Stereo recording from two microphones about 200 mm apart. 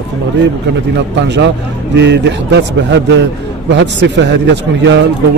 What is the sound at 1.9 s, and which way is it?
A man's voice, 60° right (ahead or behind).